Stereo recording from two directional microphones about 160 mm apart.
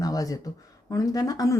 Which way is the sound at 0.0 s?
20° left (ahead or behind).